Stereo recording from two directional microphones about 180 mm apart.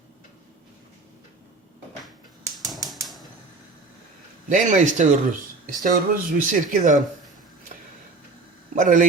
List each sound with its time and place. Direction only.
2.6 s typewriter: centre (ahead or behind)
4.4 s speech: 45° right (ahead or behind)
8.7 s a man's voice: 50° right (ahead or behind)